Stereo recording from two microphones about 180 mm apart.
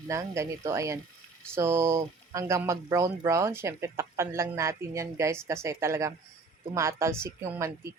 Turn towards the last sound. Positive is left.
turn(degrees=-15)  # may be behind; listen again after turning